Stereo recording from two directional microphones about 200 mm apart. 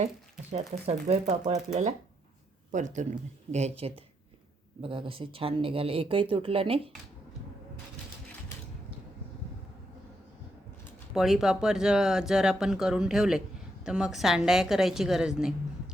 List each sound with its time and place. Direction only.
0.5 s speech: 30° right (ahead or behind)
11.1 s speech: centre (ahead or behind)